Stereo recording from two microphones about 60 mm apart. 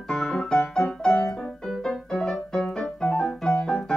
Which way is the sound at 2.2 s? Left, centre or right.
Centre.